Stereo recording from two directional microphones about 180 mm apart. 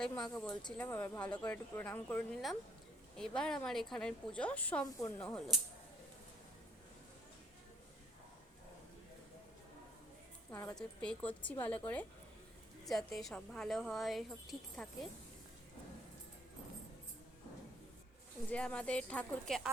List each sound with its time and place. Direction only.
0.2 s speech: 5° left (ahead or behind)
5.2 s speech: 5° left (ahead or behind)
10.5 s speech: 15° left (ahead or behind)
12.8 s speech: centre (ahead or behind)
18.5 s speech: 5° left (ahead or behind)